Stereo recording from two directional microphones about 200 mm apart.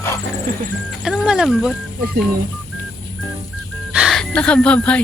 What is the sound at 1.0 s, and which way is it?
Speech, 5° right (ahead or behind).